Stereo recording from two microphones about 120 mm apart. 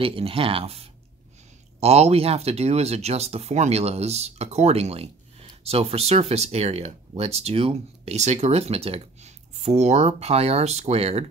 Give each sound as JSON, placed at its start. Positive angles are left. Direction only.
{"t": 0.0, "sound": "speech", "side_deg": -50}